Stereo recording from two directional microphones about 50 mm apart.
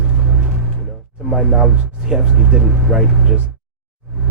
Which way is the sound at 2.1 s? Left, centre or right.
Centre.